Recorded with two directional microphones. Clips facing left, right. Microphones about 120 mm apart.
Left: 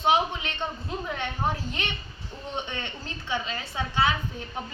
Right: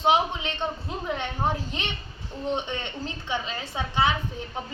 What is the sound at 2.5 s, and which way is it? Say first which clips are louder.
A woman's voice: right 3 dB; 20° right (ahead or behind).